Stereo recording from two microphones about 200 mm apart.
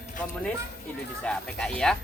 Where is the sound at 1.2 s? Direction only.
5° left (ahead or behind).